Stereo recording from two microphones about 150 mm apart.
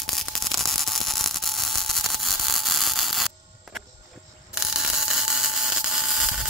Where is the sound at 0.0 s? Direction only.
Centre (ahead or behind).